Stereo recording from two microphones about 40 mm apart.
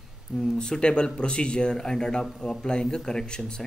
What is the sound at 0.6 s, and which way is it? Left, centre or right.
Speech, left.